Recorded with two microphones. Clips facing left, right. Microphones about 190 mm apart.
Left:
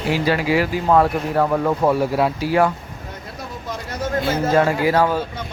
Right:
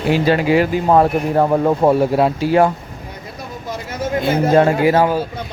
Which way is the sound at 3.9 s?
15° right (ahead or behind).